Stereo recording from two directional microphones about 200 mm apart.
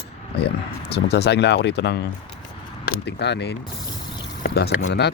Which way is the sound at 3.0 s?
60° left (ahead or behind).